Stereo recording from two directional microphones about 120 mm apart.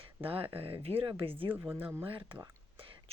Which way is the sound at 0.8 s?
50° right (ahead or behind).